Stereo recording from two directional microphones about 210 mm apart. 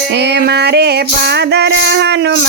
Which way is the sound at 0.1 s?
55° right (ahead or behind).